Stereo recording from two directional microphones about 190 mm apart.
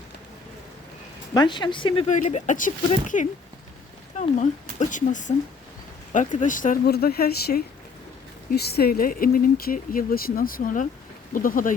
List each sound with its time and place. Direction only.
1.3 s speech: 25° left (ahead or behind)
2.0 s speech: 40° left (ahead or behind)
4.8 s speech: 40° left (ahead or behind)